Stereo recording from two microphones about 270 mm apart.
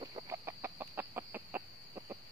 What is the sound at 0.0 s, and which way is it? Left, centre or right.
Chicken, centre.